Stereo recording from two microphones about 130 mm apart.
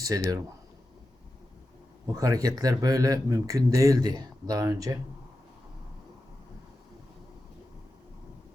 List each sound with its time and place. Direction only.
0.0 s speech: 25° right (ahead or behind)
2.1 s speech: 25° right (ahead or behind)